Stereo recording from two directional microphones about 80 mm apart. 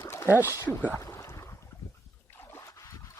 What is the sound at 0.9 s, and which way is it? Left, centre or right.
Boat, left.